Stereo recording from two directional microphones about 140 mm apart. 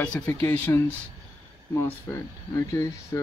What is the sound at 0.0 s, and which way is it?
Speech, 10° left (ahead or behind).